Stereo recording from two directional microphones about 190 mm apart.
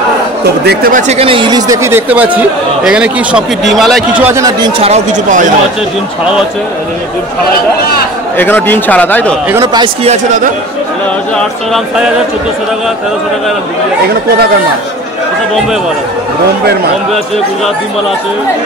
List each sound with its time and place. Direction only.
0.7 s speech: 50° right (ahead or behind)
1.0 s speech: 30° right (ahead or behind); by 4.3 s centre (ahead or behind)
4.3 s speech: 20° right (ahead or behind); by 5.5 s 40° right (ahead or behind)
8.4 s speech: 10° left (ahead or behind)
9.5 s speech: 15° right (ahead or behind)
10.0 s speech: 40° right (ahead or behind)
11.3 s speech: centre (ahead or behind)